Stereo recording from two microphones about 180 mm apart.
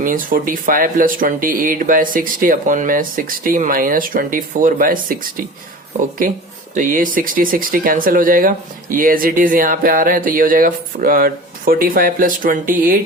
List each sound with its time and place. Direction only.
0.0 s speech: 50° right (ahead or behind)
6.7 s speech: 50° right (ahead or behind)